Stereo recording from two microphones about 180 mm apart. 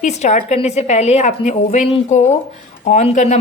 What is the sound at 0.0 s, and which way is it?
A woman's voice, 40° left (ahead or behind).